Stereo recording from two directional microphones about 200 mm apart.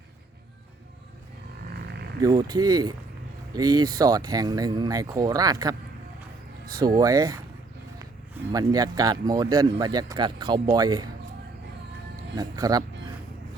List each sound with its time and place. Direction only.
1.7 s a sound: 55° right (ahead or behind)
2.2 s speech: 20° right (ahead or behind)
6.7 s speech: 20° right (ahead or behind)
8.5 s speech: 20° right (ahead or behind)
12.4 s speech: 20° right (ahead or behind)